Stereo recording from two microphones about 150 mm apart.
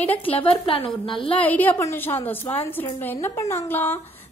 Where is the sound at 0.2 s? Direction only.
40° left (ahead or behind).